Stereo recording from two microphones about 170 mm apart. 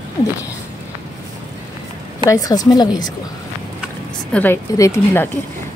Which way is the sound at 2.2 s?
20° left (ahead or behind).